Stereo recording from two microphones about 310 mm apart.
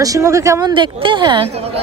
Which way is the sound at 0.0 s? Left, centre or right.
Centre.